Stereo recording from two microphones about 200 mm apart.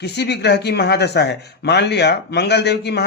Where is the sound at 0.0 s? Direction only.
55° left (ahead or behind).